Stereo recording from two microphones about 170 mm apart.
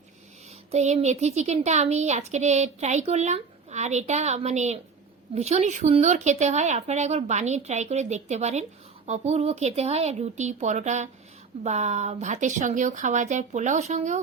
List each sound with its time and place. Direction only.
0.7 s a woman's voice: 40° right (ahead or behind)